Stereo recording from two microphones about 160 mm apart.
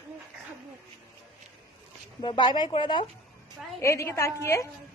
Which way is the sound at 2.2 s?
30° left (ahead or behind).